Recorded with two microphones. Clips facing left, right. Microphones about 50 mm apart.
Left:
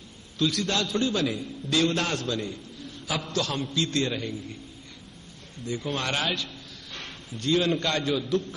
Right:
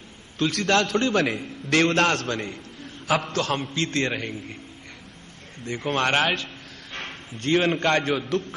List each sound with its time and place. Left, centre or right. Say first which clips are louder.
0.4 s a man's voice: right 5 dB; right
3.3 s a man's voice: right 2 dB; right
5.7 s a man's voice: right 6 dB; right